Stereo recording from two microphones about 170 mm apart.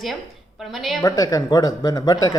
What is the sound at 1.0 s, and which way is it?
Speech, 20° left (ahead or behind).